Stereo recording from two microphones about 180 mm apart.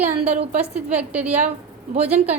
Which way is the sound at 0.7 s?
10° right (ahead or behind).